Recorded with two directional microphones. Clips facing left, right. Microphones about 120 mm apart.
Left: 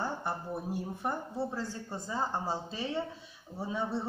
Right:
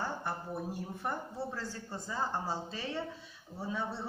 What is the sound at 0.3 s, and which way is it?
A man's voice, 15° left (ahead or behind).